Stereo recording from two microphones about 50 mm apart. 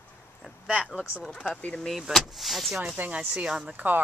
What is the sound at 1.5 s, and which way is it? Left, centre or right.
Speech, left.